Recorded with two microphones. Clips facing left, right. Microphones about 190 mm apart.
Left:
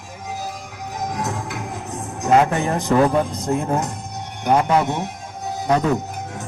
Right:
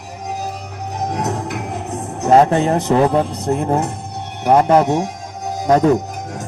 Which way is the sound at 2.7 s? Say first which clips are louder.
Right 3 dB; 35° right (ahead or behind).